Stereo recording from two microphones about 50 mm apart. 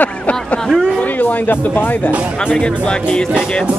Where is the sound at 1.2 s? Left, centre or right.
Left.